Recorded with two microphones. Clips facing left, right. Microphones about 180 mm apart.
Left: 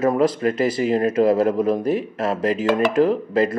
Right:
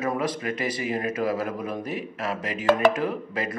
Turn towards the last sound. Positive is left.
turn(degrees=35)  # may be behind; listen again after turning